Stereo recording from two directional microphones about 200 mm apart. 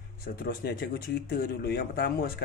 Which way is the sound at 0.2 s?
50° left (ahead or behind).